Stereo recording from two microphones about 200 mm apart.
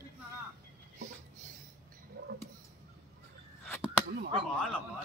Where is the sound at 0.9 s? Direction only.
35° right (ahead or behind).